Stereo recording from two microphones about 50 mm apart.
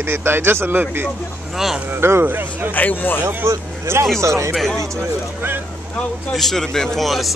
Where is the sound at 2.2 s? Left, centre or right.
Right.